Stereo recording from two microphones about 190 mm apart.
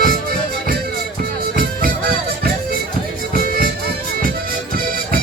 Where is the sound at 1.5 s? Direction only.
50° right (ahead or behind).